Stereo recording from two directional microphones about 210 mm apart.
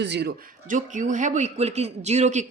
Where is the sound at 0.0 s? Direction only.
55° right (ahead or behind).